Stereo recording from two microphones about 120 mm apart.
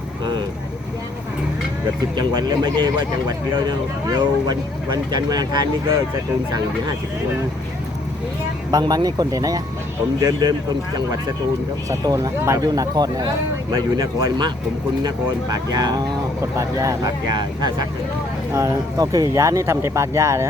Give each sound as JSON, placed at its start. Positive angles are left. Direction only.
{"t": 2.1, "sound": "speech", "side_deg": -35}
{"t": 8.7, "sound": "speech", "side_deg": -35}
{"t": 11.9, "sound": "speech", "side_deg": -30}
{"t": 18.5, "sound": "speech", "side_deg": -25}